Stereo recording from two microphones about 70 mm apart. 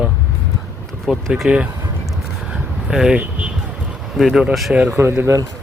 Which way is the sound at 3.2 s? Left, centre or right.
Centre.